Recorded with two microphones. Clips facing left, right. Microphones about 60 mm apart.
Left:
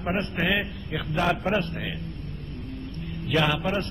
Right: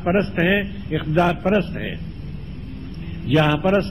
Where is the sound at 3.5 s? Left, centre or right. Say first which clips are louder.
Right 9 dB; right.